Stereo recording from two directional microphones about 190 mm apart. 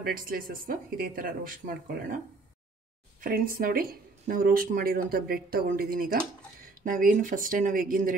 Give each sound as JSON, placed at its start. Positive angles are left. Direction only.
{"t": 0.0, "sound": "speech", "side_deg": -50}
{"t": 3.2, "sound": "speech", "side_deg": -50}